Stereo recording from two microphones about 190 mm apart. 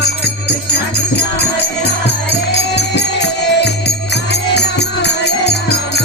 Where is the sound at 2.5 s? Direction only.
60° left (ahead or behind).